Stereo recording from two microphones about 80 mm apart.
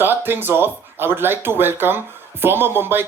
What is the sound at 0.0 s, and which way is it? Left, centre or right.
Speech, right.